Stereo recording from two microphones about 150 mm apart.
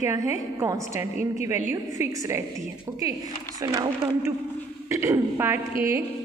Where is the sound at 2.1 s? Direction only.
20° right (ahead or behind).